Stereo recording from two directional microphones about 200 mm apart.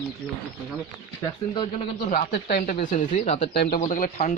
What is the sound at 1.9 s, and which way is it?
Speech, 45° left (ahead or behind).